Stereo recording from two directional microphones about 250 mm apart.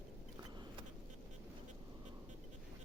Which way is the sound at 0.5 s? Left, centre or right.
Centre.